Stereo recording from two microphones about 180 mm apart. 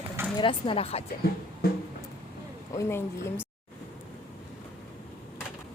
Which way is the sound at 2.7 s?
15° left (ahead or behind).